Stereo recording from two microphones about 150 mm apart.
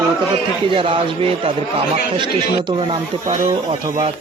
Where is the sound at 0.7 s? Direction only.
35° right (ahead or behind).